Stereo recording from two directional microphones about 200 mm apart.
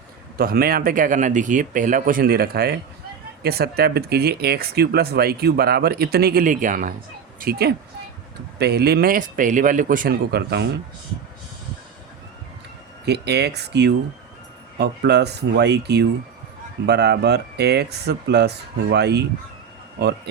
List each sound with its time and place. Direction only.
0.3 s a woman's voice: 50° right (ahead or behind)
13.1 s speech: 55° right (ahead or behind)